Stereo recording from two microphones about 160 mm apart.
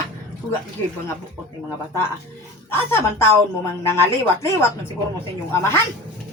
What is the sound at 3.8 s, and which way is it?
Speech, 15° left (ahead or behind).